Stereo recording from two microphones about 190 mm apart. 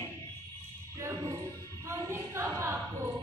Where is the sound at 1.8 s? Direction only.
15° right (ahead or behind).